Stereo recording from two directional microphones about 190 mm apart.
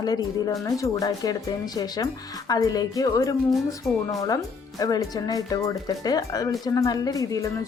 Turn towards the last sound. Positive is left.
turn(degrees=15)  # may be behind; listen again after turning